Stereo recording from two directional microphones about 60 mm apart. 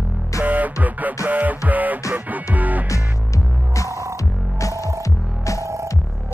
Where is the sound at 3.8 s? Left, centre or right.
Right.